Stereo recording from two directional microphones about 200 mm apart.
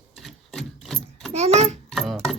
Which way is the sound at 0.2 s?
Centre (ahead or behind).